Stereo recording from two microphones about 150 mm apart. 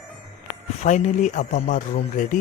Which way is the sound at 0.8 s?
50° left (ahead or behind).